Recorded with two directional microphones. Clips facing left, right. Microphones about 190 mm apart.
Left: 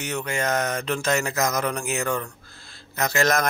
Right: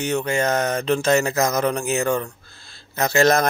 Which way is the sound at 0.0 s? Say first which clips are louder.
Right 6 dB; 30° right (ahead or behind).